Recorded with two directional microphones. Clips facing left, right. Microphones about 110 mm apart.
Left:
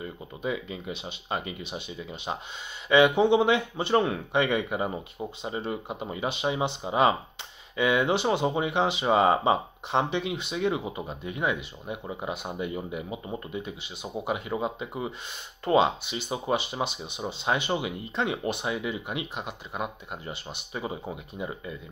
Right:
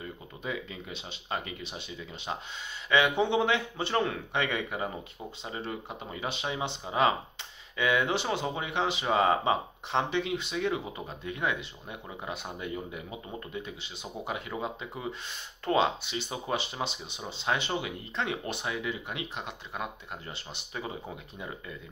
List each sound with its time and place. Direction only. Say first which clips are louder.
0.4 s speech: left 5 dB; 20° left (ahead or behind)